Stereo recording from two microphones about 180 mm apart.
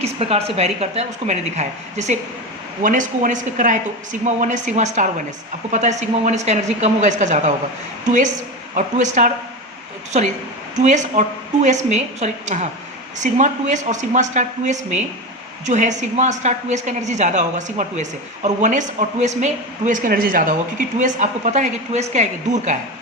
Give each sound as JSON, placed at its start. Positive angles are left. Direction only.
{"t": 0.0, "sound": "a woman's voice", "side_deg": -35}
{"t": 8.7, "sound": "speech", "side_deg": -45}
{"t": 10.8, "sound": "a woman's voice", "side_deg": -40}